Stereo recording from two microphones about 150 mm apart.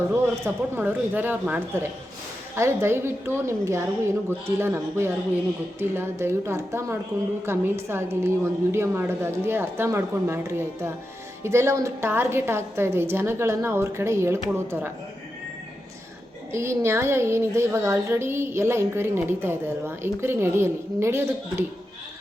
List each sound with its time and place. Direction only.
0.1 s a woman's voice: 15° right (ahead or behind)
16.5 s a woman's voice: 15° right (ahead or behind)